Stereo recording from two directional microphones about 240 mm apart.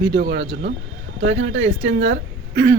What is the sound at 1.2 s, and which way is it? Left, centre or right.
A woman's voice, right.